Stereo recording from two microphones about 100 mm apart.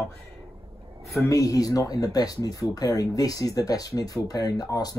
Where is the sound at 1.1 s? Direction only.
35° left (ahead or behind).